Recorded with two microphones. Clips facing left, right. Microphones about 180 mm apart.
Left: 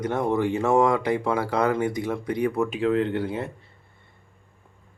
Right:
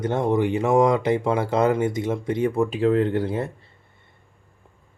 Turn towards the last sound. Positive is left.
turn(degrees=-40)  # may be behind; listen again after turning